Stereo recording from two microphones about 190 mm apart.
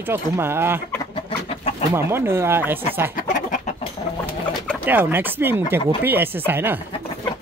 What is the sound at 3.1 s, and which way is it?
Chicken, 45° left (ahead or behind).